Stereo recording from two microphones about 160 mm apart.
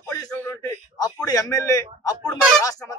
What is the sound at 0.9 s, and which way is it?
Speech, 20° left (ahead or behind).